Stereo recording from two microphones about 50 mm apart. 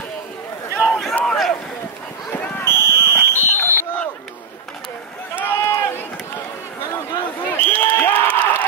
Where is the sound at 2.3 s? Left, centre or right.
Left.